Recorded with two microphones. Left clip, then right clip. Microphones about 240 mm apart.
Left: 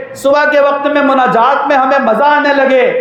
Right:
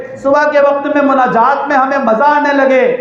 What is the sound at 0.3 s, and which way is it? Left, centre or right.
A man's voice, left.